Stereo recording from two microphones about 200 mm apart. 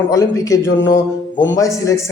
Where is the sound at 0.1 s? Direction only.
15° left (ahead or behind).